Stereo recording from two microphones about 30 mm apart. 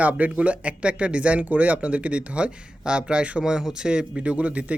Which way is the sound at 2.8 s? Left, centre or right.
Right.